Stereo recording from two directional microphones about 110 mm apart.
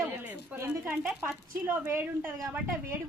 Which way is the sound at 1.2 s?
15° right (ahead or behind).